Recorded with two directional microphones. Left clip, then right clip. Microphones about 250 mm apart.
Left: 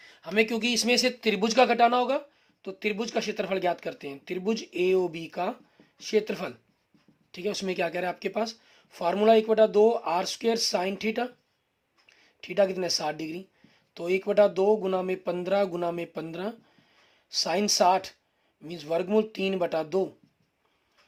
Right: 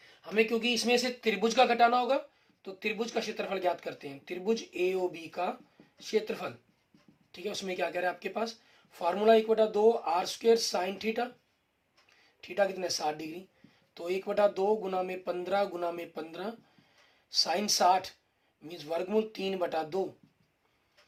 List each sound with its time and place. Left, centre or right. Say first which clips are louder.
0.1 s speech: left 3 dB; left